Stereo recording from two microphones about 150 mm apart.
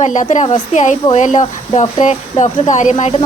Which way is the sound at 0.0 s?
55° left (ahead or behind).